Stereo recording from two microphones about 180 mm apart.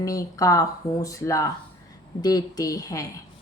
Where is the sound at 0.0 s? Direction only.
20° left (ahead or behind).